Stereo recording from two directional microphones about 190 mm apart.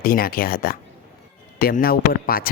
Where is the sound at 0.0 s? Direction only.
50° left (ahead or behind).